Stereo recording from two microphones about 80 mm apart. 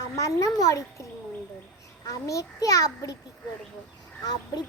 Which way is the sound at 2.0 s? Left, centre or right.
Left.